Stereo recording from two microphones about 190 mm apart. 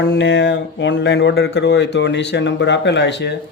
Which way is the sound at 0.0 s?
65° left (ahead or behind).